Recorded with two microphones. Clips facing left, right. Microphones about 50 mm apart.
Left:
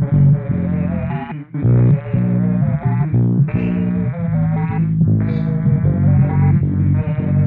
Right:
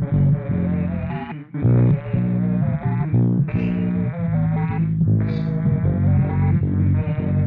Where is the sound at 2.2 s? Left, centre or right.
Left.